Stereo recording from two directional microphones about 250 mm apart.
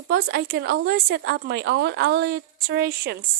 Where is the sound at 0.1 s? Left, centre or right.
Right.